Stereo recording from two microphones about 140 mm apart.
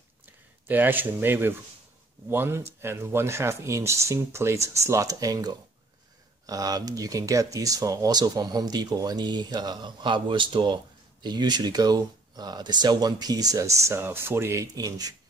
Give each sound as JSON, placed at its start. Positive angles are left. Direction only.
{"t": 0.7, "sound": "speech", "side_deg": -15}